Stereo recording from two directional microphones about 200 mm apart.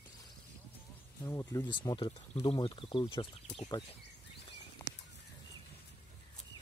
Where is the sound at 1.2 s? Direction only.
15° left (ahead or behind).